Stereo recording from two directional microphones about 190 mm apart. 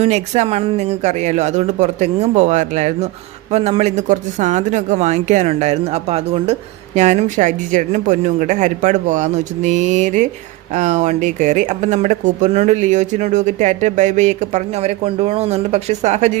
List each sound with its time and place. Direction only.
0.0 s speech: 30° right (ahead or behind)